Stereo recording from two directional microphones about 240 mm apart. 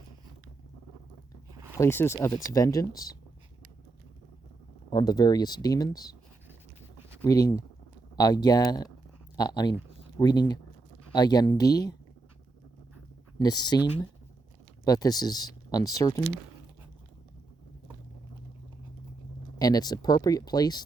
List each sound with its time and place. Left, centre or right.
1.7 s speech: centre
4.9 s speech: centre
7.2 s speech: centre
13.4 s speech: centre
14.8 s speech: centre
19.5 s speech: centre